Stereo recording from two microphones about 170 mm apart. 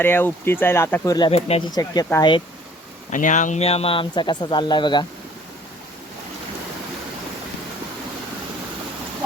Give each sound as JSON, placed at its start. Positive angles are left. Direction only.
{"t": 0.0, "sound": "speech", "side_deg": 10}
{"t": 1.3, "sound": "speech", "side_deg": 35}
{"t": 1.7, "sound": "speech", "side_deg": 25}
{"t": 3.1, "sound": "speech", "side_deg": 50}